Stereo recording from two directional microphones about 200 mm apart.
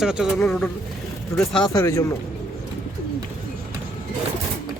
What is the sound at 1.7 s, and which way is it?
Speech, 15° left (ahead or behind).